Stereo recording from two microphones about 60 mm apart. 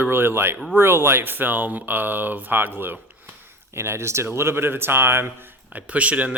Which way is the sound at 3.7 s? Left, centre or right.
Right.